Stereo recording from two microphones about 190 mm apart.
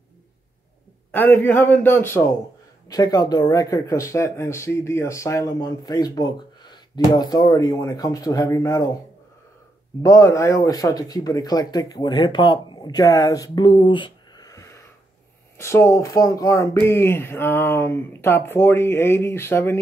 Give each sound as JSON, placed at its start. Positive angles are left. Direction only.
{"t": 1.1, "sound": "speech", "side_deg": 10}
{"t": 10.0, "sound": "speech", "side_deg": 15}